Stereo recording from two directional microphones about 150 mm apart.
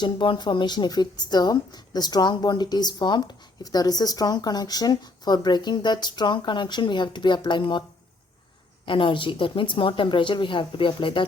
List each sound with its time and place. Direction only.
0.0 s a woman's voice: 30° left (ahead or behind)
8.9 s speech: 35° left (ahead or behind)